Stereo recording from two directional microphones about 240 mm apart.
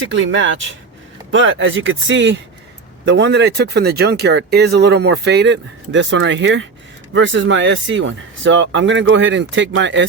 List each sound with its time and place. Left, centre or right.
0.1 s speech: right